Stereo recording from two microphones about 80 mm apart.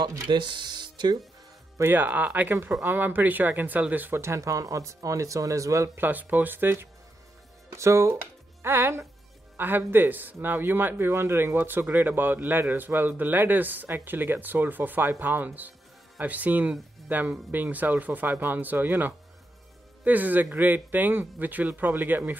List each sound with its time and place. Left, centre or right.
0.3 s speech: right
1.9 s a man's voice: right
4.2 s speech: right
5.9 s a man's voice: right